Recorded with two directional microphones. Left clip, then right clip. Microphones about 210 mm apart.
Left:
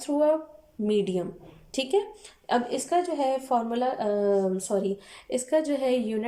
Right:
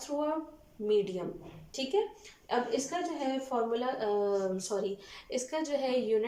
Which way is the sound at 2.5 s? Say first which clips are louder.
Left 6 dB; 50° left (ahead or behind).